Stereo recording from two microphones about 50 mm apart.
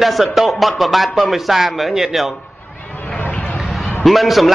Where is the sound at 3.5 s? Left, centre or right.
Centre.